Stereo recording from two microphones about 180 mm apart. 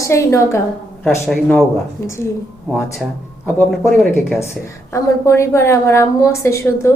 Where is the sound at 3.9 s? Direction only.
5° left (ahead or behind).